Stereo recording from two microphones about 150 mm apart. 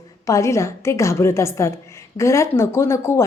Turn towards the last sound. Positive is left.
turn(degrees=20)  # may be behind; listen again after turning